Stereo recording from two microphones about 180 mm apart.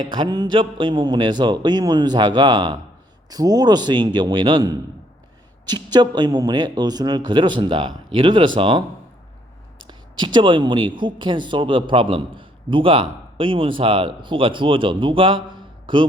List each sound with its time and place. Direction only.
0.1 s speech: 25° right (ahead or behind)
9.8 s speech: 25° right (ahead or behind)